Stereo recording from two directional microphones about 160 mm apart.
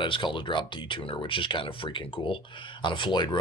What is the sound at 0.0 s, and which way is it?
Speech, 30° left (ahead or behind).